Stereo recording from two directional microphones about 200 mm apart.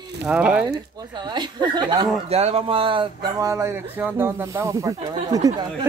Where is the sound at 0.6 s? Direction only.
20° right (ahead or behind).